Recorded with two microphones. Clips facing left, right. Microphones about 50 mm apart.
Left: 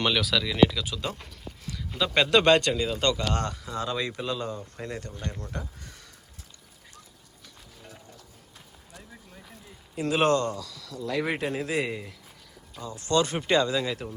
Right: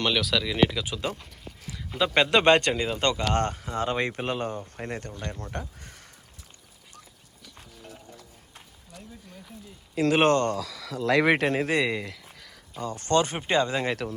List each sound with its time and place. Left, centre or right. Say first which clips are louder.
0.0 s speech: even; centre
0.5 s speech: left 4 dB; centre
1.6 s a sound: right 2 dB; centre
2.1 s speech: even; right
9.9 s speech: right 5 dB; right
10.2 s speech: right 1 dB; right
11.1 s a man's voice: right 7 dB; right
11.9 s a sound: right 5 dB; right
12.8 s a man's voice: right 5 dB; right
13.1 s speech: even; right
14.0 s a man's voice: right 5 dB; right